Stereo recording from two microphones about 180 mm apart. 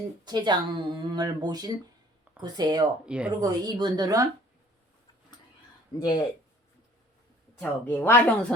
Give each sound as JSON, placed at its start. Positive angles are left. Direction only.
{"t": 0.3, "sound": "speech", "side_deg": -25}
{"t": 3.1, "sound": "speech", "side_deg": -5}
{"t": 3.4, "sound": "speech", "side_deg": -20}
{"t": 6.0, "sound": "speech", "side_deg": 25}
{"t": 7.6, "sound": "speech", "side_deg": 10}